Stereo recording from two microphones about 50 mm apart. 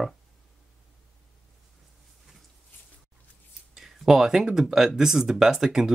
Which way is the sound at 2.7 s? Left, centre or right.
Left.